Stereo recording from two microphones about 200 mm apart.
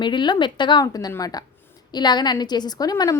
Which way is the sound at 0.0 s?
25° left (ahead or behind).